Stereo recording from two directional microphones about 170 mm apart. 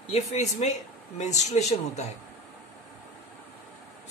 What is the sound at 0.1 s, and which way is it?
A woman's voice, 40° left (ahead or behind).